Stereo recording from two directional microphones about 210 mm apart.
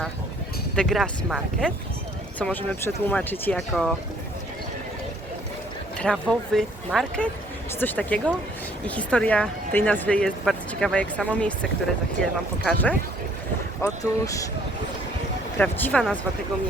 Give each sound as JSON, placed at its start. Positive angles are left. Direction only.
{"t": 0.8, "sound": "speech", "side_deg": 5}
{"t": 6.0, "sound": "speech", "side_deg": 5}
{"t": 15.5, "sound": "speech", "side_deg": 5}